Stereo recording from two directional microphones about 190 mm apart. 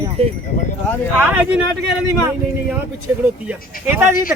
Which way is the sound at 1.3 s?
10° right (ahead or behind).